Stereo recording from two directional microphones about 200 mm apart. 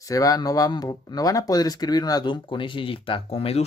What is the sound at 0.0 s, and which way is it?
Speech, 15° left (ahead or behind).